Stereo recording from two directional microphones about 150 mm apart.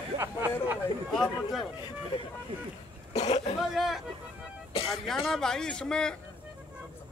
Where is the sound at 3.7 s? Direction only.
Centre (ahead or behind).